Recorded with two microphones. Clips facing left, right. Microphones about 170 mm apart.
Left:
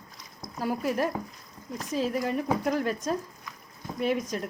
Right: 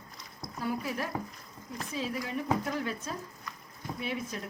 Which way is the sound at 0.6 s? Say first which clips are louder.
Left 6 dB; 45° left (ahead or behind).